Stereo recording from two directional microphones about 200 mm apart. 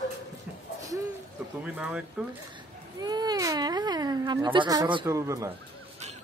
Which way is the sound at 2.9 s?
20° right (ahead or behind).